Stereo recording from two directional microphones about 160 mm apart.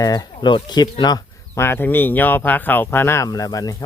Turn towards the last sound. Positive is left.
turn(degrees=20)  # may be behind; listen again after turning